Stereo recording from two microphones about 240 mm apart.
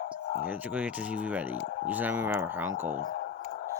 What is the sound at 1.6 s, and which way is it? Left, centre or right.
Speech, left.